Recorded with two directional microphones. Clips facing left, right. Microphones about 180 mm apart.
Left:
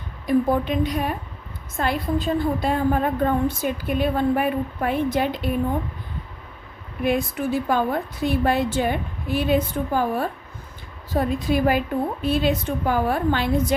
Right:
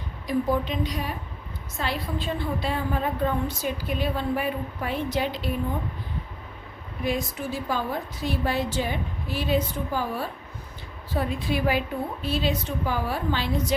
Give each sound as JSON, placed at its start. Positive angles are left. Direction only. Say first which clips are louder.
{"t": 0.3, "sound": "a woman's voice", "louder": "left 5 dB", "side_deg": 55}
{"t": 7.0, "sound": "a woman's voice", "louder": "left 6 dB", "side_deg": 60}
{"t": 11.1, "sound": "a woman's voice", "louder": "left 5 dB", "side_deg": 45}